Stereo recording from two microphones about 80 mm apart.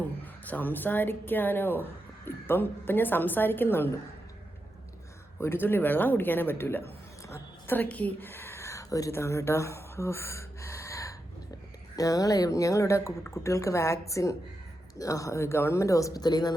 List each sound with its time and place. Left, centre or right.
0.4 s a woman's voice: left
5.4 s a woman's voice: left
7.2 s a sound: left
7.7 s speech: left
16.2 s speech: left